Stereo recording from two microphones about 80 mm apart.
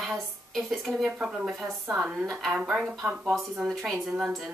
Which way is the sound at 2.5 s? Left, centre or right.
Centre.